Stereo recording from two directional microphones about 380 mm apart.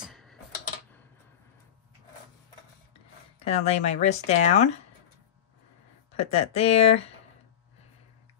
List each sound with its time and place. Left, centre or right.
0.0 s typing: centre
3.4 s speech: centre
6.1 s speech: centre